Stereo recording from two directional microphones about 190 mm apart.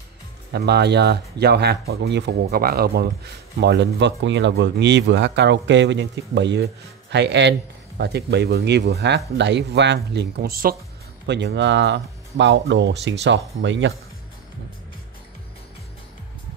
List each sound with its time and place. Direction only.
0.5 s speech: 60° right (ahead or behind)
11.2 s speech: 65° right (ahead or behind)